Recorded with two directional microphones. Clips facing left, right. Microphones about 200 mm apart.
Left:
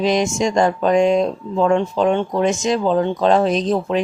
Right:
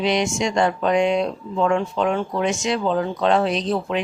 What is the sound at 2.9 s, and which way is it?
Speech, 25° left (ahead or behind).